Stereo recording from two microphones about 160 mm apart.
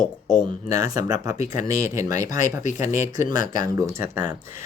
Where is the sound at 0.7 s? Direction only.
20° right (ahead or behind).